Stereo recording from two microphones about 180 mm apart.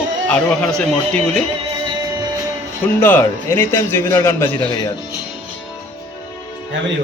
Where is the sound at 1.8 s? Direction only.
25° right (ahead or behind).